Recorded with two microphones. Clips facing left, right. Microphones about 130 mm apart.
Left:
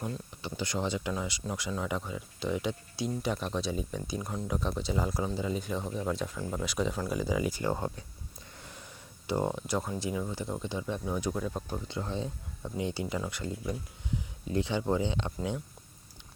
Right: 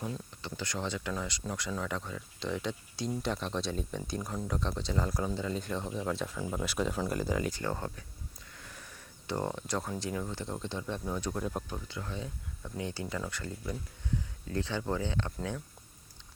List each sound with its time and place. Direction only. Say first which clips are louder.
0.4 s speech: left 4 dB; 15° left (ahead or behind)
8.5 s sniff: left 2 dB; 25° left (ahead or behind)
9.2 s speech: left 4 dB; 10° left (ahead or behind)
11.7 s speech: left 5 dB; 25° left (ahead or behind)
12.7 s speech: left 4 dB; 15° left (ahead or behind)